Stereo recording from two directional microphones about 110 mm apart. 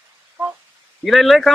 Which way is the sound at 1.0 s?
Centre (ahead or behind).